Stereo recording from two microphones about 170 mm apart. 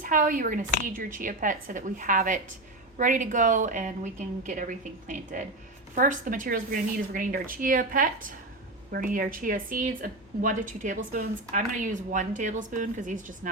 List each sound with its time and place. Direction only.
0.0 s a woman's voice: 55° right (ahead or behind)